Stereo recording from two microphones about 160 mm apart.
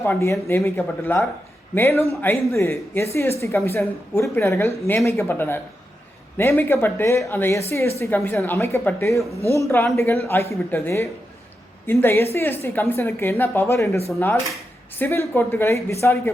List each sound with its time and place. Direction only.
0.0 s a woman's voice: 15° left (ahead or behind)